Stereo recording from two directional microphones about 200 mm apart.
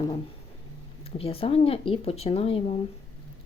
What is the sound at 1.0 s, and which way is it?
Speech, 30° left (ahead or behind).